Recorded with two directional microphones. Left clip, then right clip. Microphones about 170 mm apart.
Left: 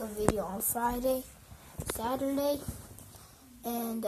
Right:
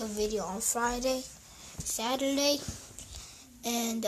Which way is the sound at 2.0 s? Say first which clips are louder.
Right 2 dB; 35° right (ahead or behind).